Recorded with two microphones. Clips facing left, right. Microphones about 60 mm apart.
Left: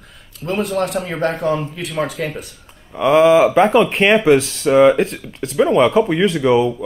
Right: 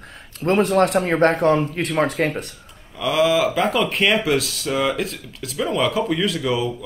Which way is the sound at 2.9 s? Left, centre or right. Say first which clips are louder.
Left 7 dB; left.